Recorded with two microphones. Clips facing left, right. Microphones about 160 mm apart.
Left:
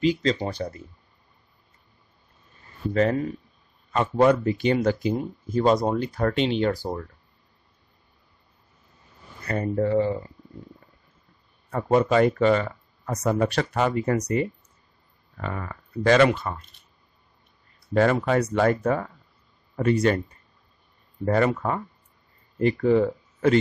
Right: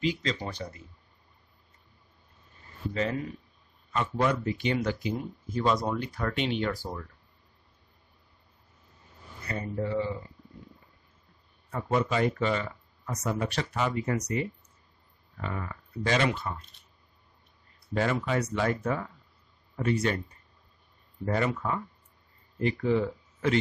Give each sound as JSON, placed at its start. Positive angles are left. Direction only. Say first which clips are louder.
{"t": 0.0, "sound": "speech", "louder": "left 7 dB", "side_deg": 35}
{"t": 2.9, "sound": "speech", "louder": "left 8 dB", "side_deg": 50}
{"t": 9.5, "sound": "speech", "louder": "left 8 dB", "side_deg": 55}
{"t": 11.7, "sound": "speech", "louder": "left 8 dB", "side_deg": 55}
{"t": 13.6, "sound": "speech", "louder": "left 6 dB", "side_deg": 50}
{"t": 17.9, "sound": "speech", "louder": "left 7 dB", "side_deg": 50}
{"t": 21.3, "sound": "speech", "louder": "left 6 dB", "side_deg": 50}